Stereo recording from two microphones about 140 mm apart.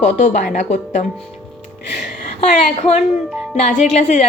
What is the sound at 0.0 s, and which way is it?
A woman's voice, 65° left (ahead or behind).